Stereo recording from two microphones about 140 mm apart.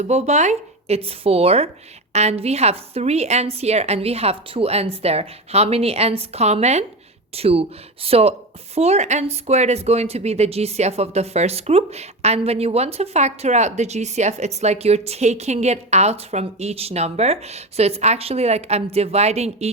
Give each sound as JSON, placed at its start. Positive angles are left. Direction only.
{"t": 0.0, "sound": "a woman's voice", "side_deg": -50}